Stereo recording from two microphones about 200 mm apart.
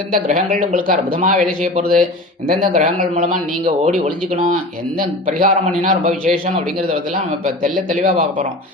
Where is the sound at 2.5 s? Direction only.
40° right (ahead or behind).